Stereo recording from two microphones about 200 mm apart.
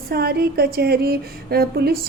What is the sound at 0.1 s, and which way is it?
A woman's voice, 50° right (ahead or behind).